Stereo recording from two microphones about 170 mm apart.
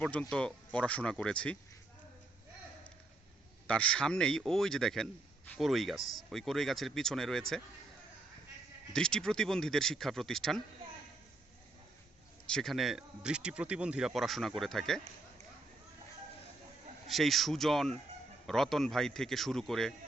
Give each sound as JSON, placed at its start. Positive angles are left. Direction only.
{"t": 0.0, "sound": "speech", "side_deg": 5}
{"t": 3.7, "sound": "speech", "side_deg": 5}
{"t": 8.9, "sound": "speech", "side_deg": 5}
{"t": 12.5, "sound": "speech", "side_deg": 0}
{"t": 17.1, "sound": "speech", "side_deg": 0}